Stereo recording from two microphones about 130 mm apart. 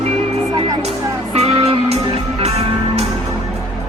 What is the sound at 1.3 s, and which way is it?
Music, 50° right (ahead or behind).